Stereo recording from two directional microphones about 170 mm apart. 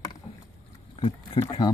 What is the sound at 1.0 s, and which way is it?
Speech, 30° left (ahead or behind).